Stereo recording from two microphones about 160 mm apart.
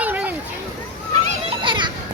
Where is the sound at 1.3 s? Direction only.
35° right (ahead or behind).